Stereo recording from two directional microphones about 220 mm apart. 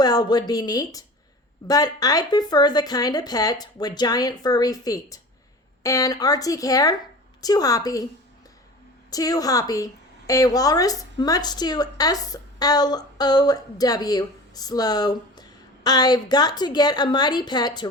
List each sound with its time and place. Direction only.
0.0 s a woman's voice: 20° left (ahead or behind)
9.0 s a woman's voice: 15° left (ahead or behind)